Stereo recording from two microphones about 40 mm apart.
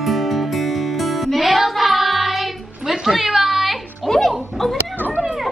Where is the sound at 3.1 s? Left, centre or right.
Centre.